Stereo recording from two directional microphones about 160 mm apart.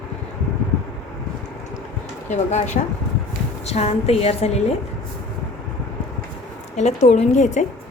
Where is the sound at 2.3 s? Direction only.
45° left (ahead or behind).